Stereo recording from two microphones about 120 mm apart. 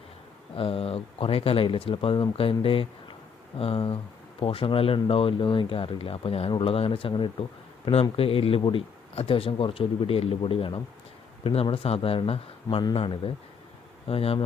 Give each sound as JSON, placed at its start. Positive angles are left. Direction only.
{"t": 0.5, "sound": "speech", "side_deg": 50}